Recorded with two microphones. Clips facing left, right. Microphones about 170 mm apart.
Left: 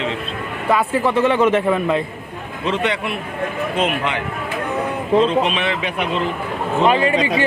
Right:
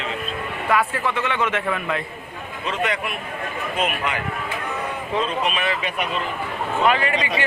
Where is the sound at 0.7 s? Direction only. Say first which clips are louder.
Left 4 dB; 25° left (ahead or behind).